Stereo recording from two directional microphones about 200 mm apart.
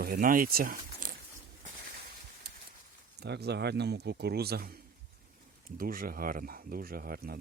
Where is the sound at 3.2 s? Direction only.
55° right (ahead or behind).